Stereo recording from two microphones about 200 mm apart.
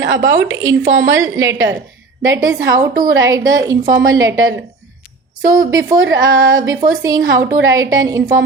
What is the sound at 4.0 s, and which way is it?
Speech, 75° right (ahead or behind).